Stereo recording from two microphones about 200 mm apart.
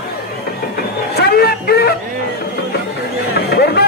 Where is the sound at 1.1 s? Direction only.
55° left (ahead or behind).